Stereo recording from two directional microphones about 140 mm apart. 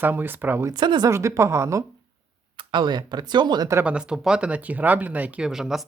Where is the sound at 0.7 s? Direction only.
30° right (ahead or behind).